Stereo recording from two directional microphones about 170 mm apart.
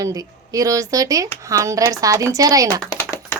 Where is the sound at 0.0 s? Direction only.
20° right (ahead or behind).